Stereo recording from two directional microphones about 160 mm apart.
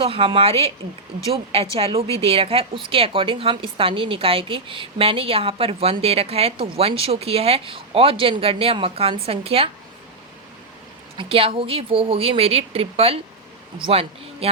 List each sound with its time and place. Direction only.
0.0 s a woman's voice: 35° right (ahead or behind)
1.7 s a woman's voice: 35° right (ahead or behind)
11.2 s a woman's voice: 35° right (ahead or behind)